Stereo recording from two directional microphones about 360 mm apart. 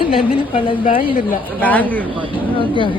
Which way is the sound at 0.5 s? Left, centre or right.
Centre.